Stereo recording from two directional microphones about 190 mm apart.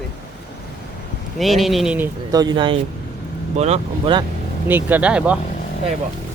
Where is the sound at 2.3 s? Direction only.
20° right (ahead or behind).